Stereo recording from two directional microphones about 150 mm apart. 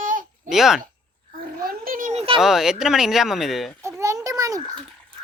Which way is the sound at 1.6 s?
70° right (ahead or behind).